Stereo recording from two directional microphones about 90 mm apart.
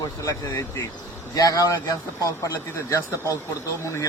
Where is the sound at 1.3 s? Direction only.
40° left (ahead or behind).